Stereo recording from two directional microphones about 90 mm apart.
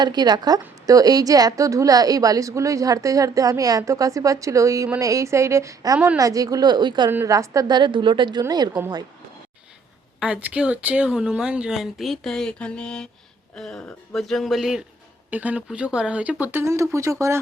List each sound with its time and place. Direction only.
0.0 s a woman's voice: 50° right (ahead or behind)
7.3 s a woman's voice: 40° right (ahead or behind)
7.8 s a woman's voice: 60° right (ahead or behind)
10.2 s speech: 10° right (ahead or behind)
15.3 s speech: 15° right (ahead or behind); by 17.4 s 35° right (ahead or behind)